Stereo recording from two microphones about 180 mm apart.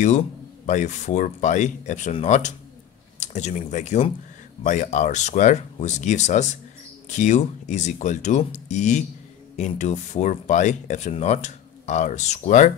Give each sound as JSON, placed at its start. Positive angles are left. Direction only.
{"t": 0.7, "sound": "speech", "side_deg": 40}